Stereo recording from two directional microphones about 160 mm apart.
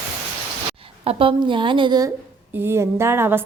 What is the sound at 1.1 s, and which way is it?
A woman's voice, 35° right (ahead or behind).